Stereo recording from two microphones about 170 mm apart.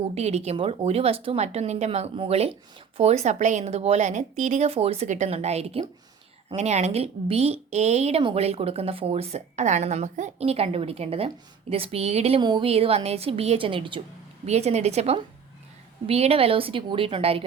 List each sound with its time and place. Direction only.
0.1 s speech: 40° right (ahead or behind)
12.4 s speech: 25° right (ahead or behind)